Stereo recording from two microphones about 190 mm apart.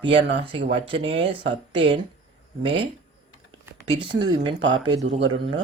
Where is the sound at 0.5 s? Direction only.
70° right (ahead or behind).